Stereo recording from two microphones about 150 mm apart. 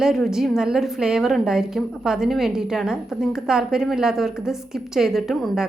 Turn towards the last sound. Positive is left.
turn(degrees=0)  # may be behind; listen again after turning